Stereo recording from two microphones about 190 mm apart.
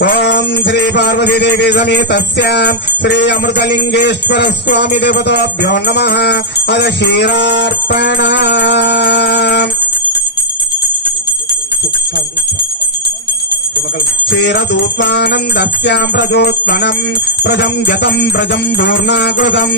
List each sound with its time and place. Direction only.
0.0 s jingle bell: 60° left (ahead or behind)
14.2 s jingle bell: 65° left (ahead or behind)